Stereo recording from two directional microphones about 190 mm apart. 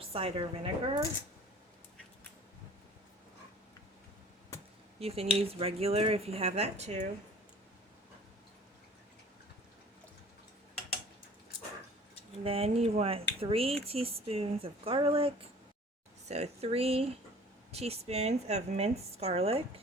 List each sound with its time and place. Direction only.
0.0 s a woman's voice: 30° right (ahead or behind)
4.9 s speech: 30° right (ahead or behind)
12.4 s speech: 30° right (ahead or behind)